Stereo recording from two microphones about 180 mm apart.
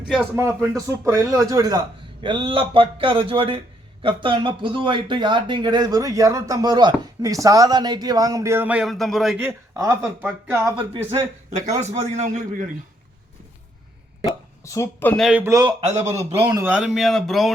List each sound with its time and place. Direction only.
0.3 s speech: 15° right (ahead or behind); by 9.4 s centre (ahead or behind)
9.4 s speech: 15° right (ahead or behind)
11.6 s a man's voice: 40° right (ahead or behind)
14.6 s speech: 15° left (ahead or behind)
15.2 s speech: 5° right (ahead or behind)
15.4 s speech: 20° right (ahead or behind)
16.7 s speech: 5° right (ahead or behind)